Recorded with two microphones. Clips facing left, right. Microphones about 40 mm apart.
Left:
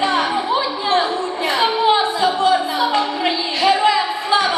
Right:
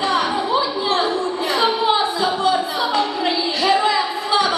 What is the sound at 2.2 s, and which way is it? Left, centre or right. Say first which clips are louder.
Music: left 2 dB; centre.